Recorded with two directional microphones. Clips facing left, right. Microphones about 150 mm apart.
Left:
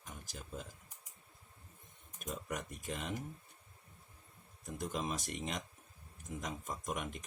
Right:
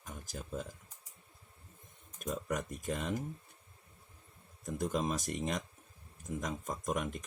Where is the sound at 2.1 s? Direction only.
45° right (ahead or behind).